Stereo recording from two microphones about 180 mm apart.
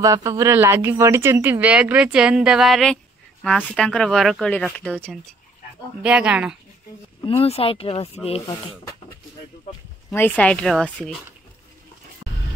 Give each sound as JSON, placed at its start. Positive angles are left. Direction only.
{"t": 0.0, "sound": "speech", "side_deg": -20}
{"t": 7.2, "sound": "speech", "side_deg": 35}
{"t": 10.1, "sound": "speech", "side_deg": 10}